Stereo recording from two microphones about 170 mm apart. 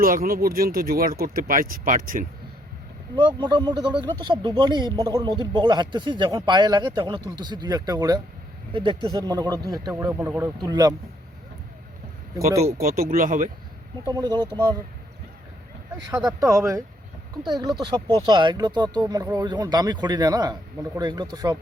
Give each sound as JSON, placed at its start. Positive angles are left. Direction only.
{"t": 0.0, "sound": "speech", "side_deg": -55}
{"t": 3.2, "sound": "speech", "side_deg": -30}
{"t": 10.6, "sound": "speech", "side_deg": -25}
{"t": 12.7, "sound": "speech", "side_deg": -60}
{"t": 14.0, "sound": "speech", "side_deg": -25}
{"t": 16.4, "sound": "speech", "side_deg": -20}